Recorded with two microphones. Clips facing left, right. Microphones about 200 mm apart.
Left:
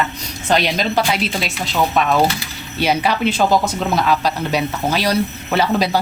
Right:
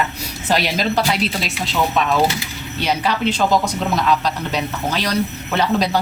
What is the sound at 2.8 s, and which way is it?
A man's voice, 10° left (ahead or behind).